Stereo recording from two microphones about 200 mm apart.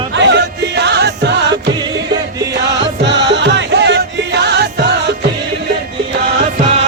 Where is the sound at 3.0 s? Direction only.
60° right (ahead or behind).